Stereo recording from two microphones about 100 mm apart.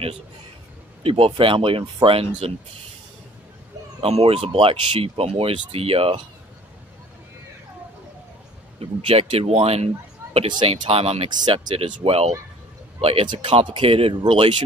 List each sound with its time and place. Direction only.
1.0 s speech: 70° right (ahead or behind)
4.0 s speech: 80° right
9.0 s speech: 65° right (ahead or behind); by 9.8 s 90° right
10.2 s a sound: 30° right (ahead or behind)
10.7 s speech: 70° right (ahead or behind)
11.4 s speech: 65° right (ahead or behind)
13.3 s speech: 55° right (ahead or behind)